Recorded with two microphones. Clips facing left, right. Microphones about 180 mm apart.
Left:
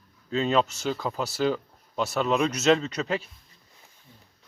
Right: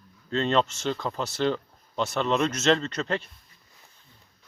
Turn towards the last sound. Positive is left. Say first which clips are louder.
# even
turn(degrees=5)  # may be behind; listen again after turning